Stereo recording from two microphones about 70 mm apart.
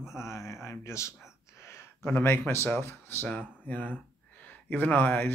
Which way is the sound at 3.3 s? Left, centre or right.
Left.